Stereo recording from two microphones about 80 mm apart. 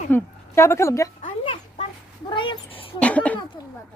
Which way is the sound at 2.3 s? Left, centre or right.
Left.